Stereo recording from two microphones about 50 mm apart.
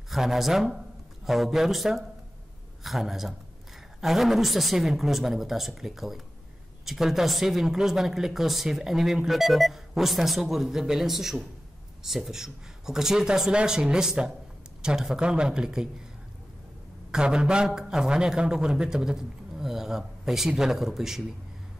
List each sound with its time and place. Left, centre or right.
0.1 s a man's voice: centre
17.1 s a man's voice: centre